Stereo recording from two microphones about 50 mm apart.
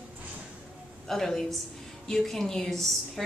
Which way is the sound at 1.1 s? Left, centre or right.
Centre.